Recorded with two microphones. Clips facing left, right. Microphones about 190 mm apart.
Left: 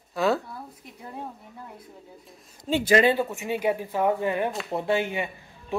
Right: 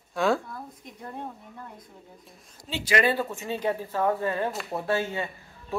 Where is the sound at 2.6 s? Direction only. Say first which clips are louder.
Left 9 dB; 50° left (ahead or behind).